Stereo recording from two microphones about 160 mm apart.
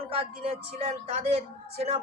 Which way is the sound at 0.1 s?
35° right (ahead or behind).